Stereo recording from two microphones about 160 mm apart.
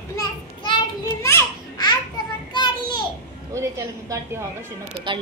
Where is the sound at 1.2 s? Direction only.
20° left (ahead or behind).